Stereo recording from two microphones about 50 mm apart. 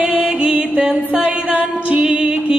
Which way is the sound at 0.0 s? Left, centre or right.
Right.